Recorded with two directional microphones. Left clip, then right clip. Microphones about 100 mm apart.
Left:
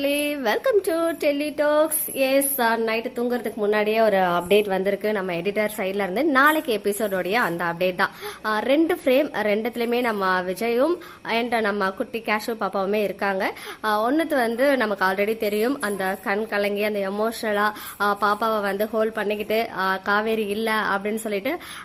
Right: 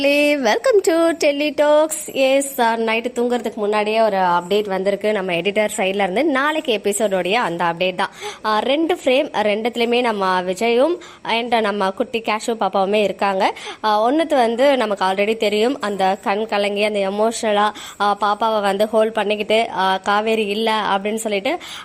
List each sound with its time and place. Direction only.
0.0 s a sound: 55° right (ahead or behind); by 3.5 s 30° right (ahead or behind)
3.6 s speech: 5° right (ahead or behind)
4.0 s a woman's voice: 10° left (ahead or behind)
5.1 s a woman's voice: 25° right (ahead or behind)